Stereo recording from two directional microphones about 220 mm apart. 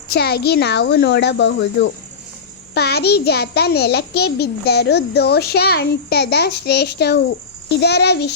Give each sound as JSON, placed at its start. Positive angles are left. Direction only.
{"t": 0.1, "sound": "a child's voice", "side_deg": 45}